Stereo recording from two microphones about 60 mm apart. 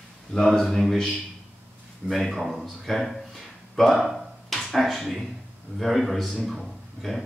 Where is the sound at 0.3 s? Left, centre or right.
Centre.